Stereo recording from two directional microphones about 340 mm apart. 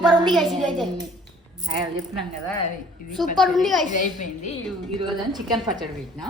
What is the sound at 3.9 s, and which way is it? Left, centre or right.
Speech, left.